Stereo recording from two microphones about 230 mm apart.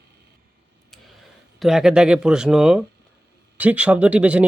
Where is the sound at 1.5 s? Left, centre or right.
Centre.